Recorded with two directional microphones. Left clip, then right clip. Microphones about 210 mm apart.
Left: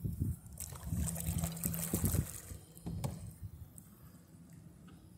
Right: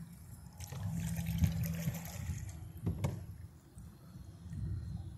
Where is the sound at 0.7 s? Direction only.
40° left (ahead or behind).